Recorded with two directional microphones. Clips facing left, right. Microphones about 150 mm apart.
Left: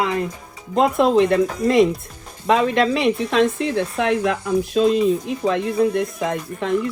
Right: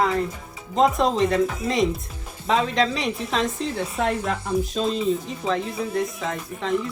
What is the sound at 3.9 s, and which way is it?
Speech, 90° left.